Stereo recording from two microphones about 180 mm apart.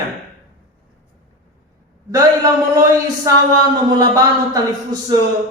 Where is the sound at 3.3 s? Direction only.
15° right (ahead or behind).